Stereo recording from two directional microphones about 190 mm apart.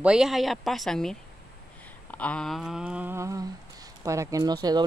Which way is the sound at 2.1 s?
5° left (ahead or behind).